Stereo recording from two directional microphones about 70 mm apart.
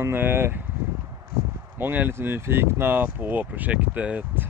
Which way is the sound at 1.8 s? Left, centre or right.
Right.